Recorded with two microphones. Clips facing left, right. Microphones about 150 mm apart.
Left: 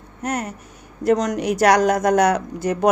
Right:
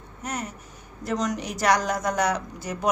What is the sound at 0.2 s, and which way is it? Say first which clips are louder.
A woman's voice: left 7 dB; 55° left (ahead or behind).